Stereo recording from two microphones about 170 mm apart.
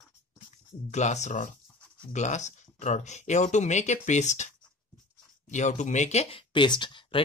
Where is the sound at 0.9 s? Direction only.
45° left (ahead or behind).